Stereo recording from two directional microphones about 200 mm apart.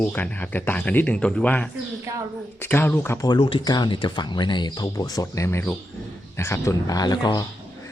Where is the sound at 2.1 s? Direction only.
15° right (ahead or behind).